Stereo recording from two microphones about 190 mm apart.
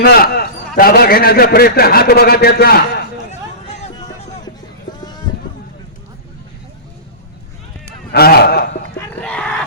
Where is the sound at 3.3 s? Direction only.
40° left (ahead or behind).